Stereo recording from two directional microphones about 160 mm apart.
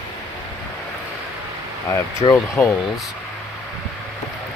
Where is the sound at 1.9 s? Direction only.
15° left (ahead or behind).